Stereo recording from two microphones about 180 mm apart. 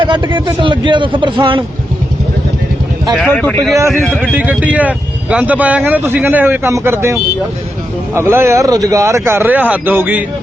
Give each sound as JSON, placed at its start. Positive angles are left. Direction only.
{"t": 0.0, "sound": "a man's voice", "side_deg": -25}
{"t": 3.1, "sound": "speech", "side_deg": 0}
{"t": 3.8, "sound": "speech", "side_deg": -15}
{"t": 4.0, "sound": "speech", "side_deg": 0}